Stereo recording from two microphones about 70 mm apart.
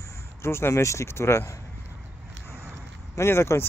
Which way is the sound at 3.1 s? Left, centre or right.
Left.